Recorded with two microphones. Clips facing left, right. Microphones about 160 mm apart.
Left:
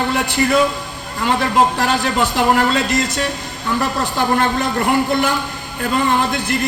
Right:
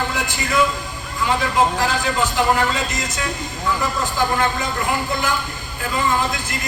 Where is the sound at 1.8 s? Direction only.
65° left (ahead or behind).